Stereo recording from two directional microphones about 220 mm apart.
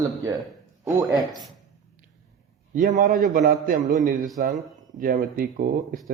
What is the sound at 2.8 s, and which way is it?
A man's voice, 35° right (ahead or behind).